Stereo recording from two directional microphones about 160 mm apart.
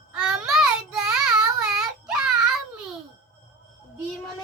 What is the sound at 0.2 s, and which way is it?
Child singing, 5° right (ahead or behind).